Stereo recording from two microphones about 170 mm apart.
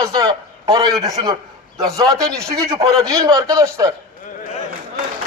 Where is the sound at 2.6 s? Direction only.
20° right (ahead or behind).